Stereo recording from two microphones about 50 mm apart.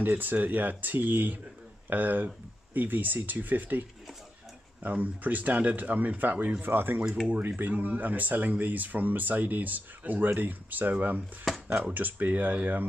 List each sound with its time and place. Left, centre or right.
0.0 s speech: right
4.8 s speech: right